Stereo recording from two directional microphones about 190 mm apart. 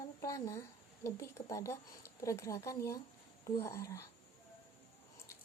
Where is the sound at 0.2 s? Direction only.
15° left (ahead or behind).